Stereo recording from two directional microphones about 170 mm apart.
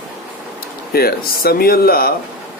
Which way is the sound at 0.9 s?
60° left (ahead or behind).